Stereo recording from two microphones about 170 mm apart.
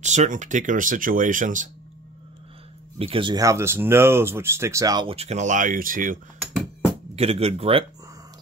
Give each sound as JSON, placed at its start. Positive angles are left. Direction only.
{"t": 0.0, "sound": "speech", "side_deg": -45}
{"t": 3.0, "sound": "speech", "side_deg": -30}
{"t": 5.1, "sound": "speech", "side_deg": -40}
{"t": 7.2, "sound": "speech", "side_deg": -35}